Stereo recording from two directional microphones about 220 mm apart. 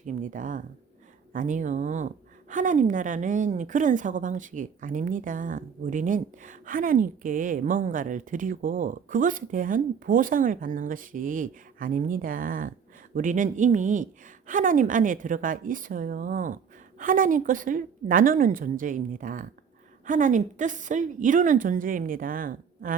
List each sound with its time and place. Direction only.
0.0 s a woman's voice: 35° right (ahead or behind)